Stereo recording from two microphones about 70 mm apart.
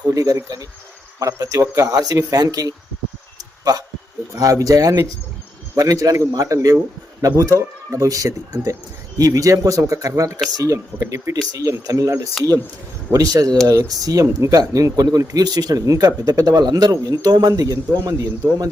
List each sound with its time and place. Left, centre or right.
0.0 s speech: right
17.5 s speech: right